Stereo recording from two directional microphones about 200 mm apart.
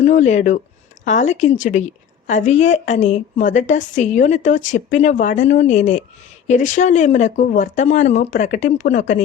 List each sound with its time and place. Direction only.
0.0 s a woman's voice: 35° left (ahead or behind)